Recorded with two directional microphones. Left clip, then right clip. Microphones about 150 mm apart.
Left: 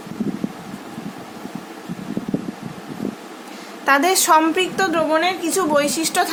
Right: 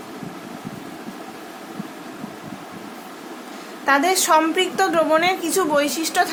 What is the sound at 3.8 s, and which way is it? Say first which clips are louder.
A woman's voice: left 2 dB; 35° left (ahead or behind).